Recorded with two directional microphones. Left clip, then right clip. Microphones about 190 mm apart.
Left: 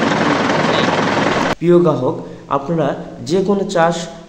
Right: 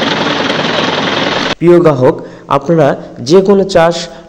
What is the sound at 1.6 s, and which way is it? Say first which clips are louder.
A man's voice: right 8 dB; 35° right (ahead or behind).